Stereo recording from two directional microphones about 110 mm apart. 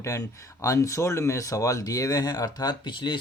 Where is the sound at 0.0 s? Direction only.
30° left (ahead or behind).